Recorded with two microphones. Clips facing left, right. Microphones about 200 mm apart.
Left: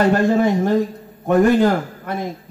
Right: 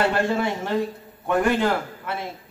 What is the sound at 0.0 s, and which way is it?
A man's voice, 45° left (ahead or behind).